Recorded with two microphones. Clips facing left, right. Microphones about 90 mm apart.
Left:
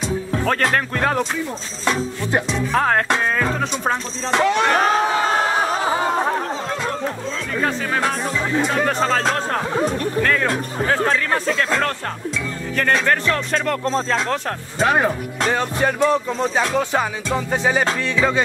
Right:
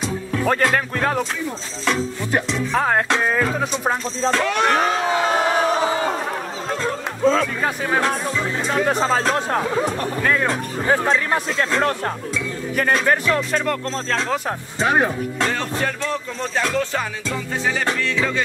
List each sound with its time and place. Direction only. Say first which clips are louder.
0.5 s speech: right 2 dB; 15° right (ahead or behind)
0.9 s speech: left 1 dB; centre (ahead or behind)
1.9 s music: left 1 dB; 20° left (ahead or behind)
2.5 s speech: left 1 dB; centre (ahead or behind)
4.3 s music: left 3 dB; 15° left (ahead or behind)
8.8 s speech: even; 15° right (ahead or behind)
13.8 s music: left 4 dB; 15° left (ahead or behind)
15.0 s speech: left 2 dB; 20° left (ahead or behind)